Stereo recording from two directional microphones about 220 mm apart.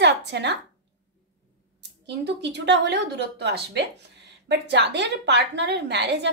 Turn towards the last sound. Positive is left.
turn(degrees=-50)  # may be behind; listen again after turning